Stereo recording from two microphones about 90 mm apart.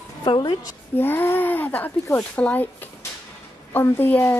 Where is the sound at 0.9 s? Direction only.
25° left (ahead or behind).